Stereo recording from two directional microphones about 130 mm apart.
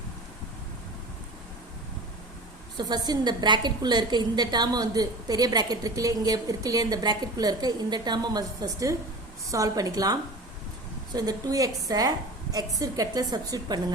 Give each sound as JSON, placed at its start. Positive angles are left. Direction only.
{"t": 2.7, "sound": "a woman's voice", "side_deg": -35}